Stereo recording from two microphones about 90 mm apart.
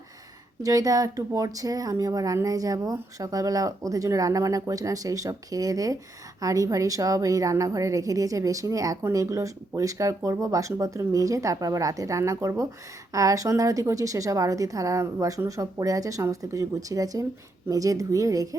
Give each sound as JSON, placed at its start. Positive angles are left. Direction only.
{"t": 0.6, "sound": "speech", "side_deg": -40}